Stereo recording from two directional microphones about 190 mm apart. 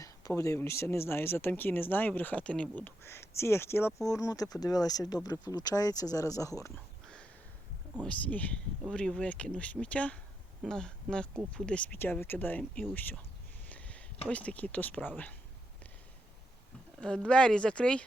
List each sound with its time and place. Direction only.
0.0 s speech: 15° left (ahead or behind)
8.0 s speech: 5° left (ahead or behind)
13.7 s a sound: 5° left (ahead or behind)
14.3 s speech: 5° left (ahead or behind)
17.0 s speech: 5° left (ahead or behind)